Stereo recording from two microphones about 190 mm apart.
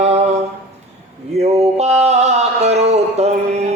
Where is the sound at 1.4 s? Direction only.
35° right (ahead or behind).